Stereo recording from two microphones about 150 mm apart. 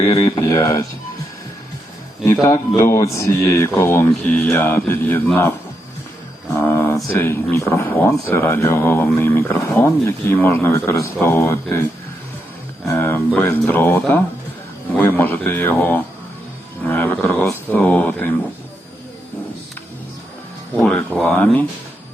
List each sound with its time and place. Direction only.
0.2 s speech: 20° left (ahead or behind)
2.2 s speech: 20° left (ahead or behind)
6.6 s speech: 15° left (ahead or behind)
12.9 s speech: 15° left (ahead or behind)
20.7 s speech: 5° left (ahead or behind)